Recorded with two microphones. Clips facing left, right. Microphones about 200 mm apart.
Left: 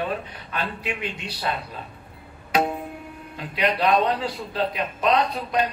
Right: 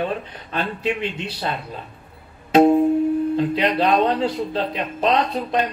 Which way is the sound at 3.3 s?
30° right (ahead or behind).